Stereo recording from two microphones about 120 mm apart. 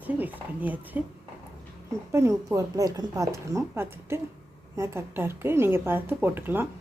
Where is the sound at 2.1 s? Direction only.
25° right (ahead or behind).